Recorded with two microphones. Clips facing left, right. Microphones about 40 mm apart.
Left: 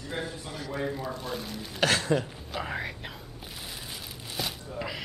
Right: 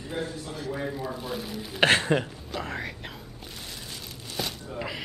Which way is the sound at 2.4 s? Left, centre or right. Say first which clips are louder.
Even; centre.